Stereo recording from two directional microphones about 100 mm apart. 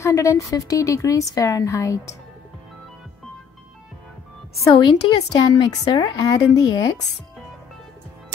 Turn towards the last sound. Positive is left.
turn(degrees=40)  # may be behind; listen again after turning